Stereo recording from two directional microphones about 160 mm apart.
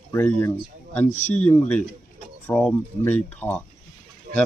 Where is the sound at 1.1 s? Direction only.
45° left (ahead or behind).